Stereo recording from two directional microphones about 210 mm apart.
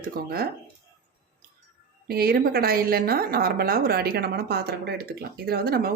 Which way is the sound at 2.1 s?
45° right (ahead or behind).